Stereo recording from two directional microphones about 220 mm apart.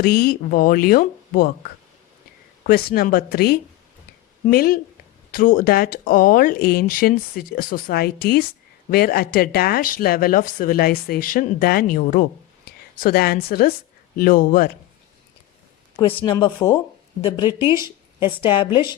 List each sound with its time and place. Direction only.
0.0 s speech: 45° left (ahead or behind)
2.6 s speech: 45° left (ahead or behind)
16.0 s speech: 20° left (ahead or behind)
17.6 s speech: 10° right (ahead or behind)
17.8 s a woman's voice: 20° left (ahead or behind)